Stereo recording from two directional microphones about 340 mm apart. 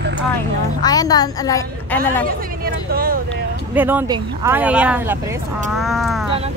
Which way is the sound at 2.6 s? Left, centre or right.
Right.